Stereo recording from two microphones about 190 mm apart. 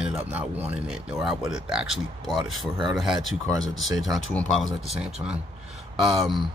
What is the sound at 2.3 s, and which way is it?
Speech, 25° right (ahead or behind).